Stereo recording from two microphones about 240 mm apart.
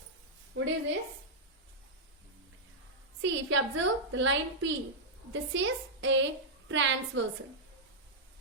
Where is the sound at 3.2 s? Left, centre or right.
Right.